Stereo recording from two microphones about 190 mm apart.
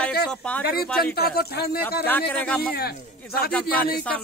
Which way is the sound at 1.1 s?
55° left (ahead or behind).